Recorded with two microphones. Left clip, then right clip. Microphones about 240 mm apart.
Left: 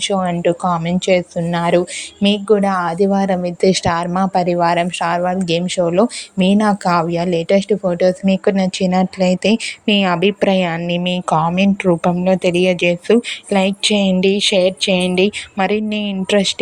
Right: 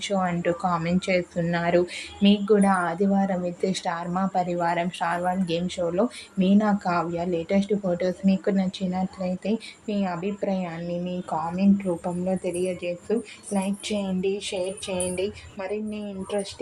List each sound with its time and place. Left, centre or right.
0.0 s a woman's voice: left